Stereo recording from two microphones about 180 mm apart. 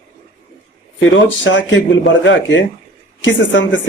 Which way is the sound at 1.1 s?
90° left.